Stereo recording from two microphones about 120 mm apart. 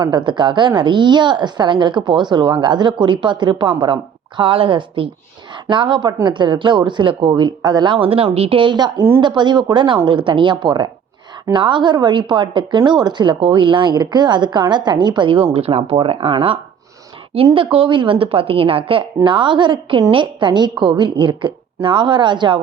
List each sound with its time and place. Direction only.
0.0 s a woman's voice: 40° right (ahead or behind)
17.3 s a woman's voice: 50° right (ahead or behind)